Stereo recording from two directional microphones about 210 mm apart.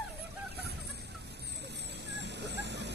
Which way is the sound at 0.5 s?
50° right (ahead or behind).